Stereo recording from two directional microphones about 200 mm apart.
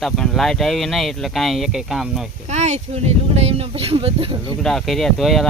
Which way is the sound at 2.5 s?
35° right (ahead or behind).